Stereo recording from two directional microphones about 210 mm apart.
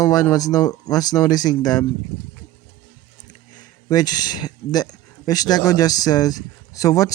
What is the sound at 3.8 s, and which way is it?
Speech, 20° left (ahead or behind).